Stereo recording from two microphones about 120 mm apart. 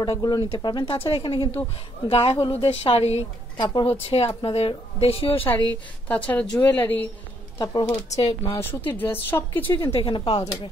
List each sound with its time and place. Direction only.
0.0 s a woman's voice: 35° left (ahead or behind); by 3.2 s 55° left (ahead or behind)
3.5 s a woman's voice: 40° left (ahead or behind)
4.0 s a woman's voice: 50° left (ahead or behind)
6.0 s speech: 10° left (ahead or behind)
7.5 s speech: 35° left (ahead or behind)
8.1 s a woman's voice: 60° left (ahead or behind)
8.5 s speech: 15° left (ahead or behind)
9.9 s a woman's voice: 45° left (ahead or behind)